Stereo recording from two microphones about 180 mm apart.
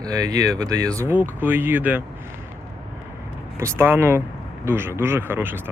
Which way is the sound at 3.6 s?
15° right (ahead or behind).